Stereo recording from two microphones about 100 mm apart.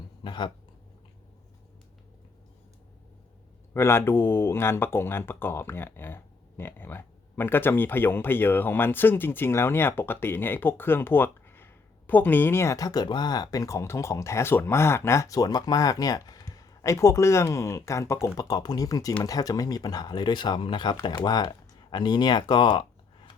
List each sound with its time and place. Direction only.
0.2 s speech: 50° left (ahead or behind)
3.8 s speech: 25° left (ahead or behind); by 23.3 s 50° left (ahead or behind)